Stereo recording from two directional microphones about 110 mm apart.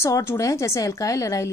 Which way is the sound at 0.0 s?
25° left (ahead or behind).